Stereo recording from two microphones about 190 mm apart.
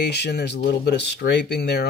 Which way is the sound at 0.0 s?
60° left (ahead or behind).